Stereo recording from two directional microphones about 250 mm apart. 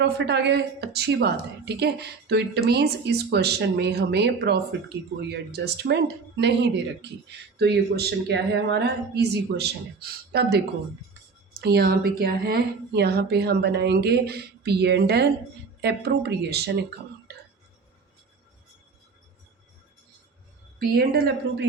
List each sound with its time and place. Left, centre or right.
0.0 s a woman's voice: right
11.6 s a woman's voice: right
20.7 s a woman's voice: right